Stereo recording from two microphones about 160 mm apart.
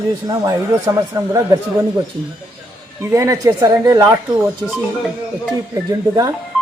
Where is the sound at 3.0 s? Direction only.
15° right (ahead or behind).